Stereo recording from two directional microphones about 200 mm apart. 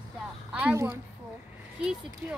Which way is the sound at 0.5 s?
5° right (ahead or behind).